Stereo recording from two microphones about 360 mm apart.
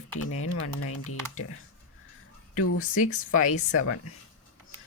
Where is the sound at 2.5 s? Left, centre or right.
Left.